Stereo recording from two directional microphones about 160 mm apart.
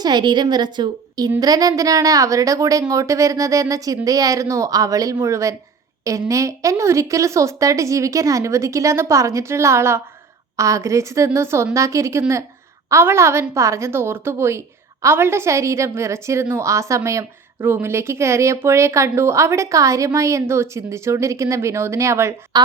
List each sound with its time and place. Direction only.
0.0 s a woman's voice: 25° right (ahead or behind)